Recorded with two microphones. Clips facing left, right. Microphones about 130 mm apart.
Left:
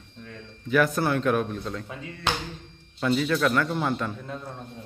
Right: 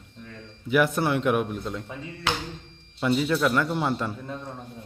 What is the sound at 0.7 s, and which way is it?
A man's voice, 20° right (ahead or behind).